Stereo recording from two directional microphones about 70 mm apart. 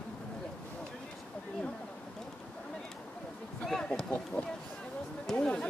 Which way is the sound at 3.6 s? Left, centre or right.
Centre.